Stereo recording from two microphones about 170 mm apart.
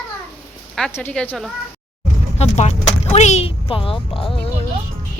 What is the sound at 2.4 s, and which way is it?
A woman's voice, 40° left (ahead or behind).